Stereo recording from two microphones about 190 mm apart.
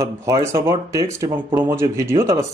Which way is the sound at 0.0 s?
15° right (ahead or behind).